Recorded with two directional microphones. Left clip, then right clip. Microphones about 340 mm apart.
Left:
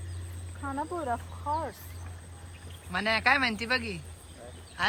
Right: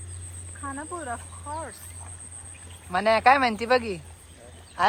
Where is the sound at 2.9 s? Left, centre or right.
Centre.